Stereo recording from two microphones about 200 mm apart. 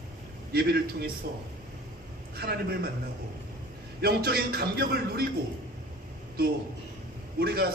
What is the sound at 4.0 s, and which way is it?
A man's voice, 50° right (ahead or behind).